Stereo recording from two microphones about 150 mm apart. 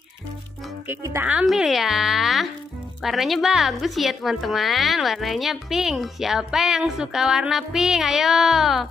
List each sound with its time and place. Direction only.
0.8 s speech: 15° right (ahead or behind)
1.3 s speech: centre (ahead or behind)